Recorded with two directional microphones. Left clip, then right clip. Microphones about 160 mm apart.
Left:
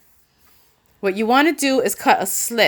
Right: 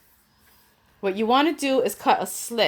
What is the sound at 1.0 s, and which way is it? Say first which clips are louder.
A woman's voice: left 4 dB; 30° left (ahead or behind).